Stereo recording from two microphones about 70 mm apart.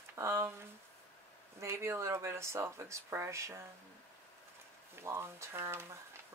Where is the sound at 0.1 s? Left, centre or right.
Right.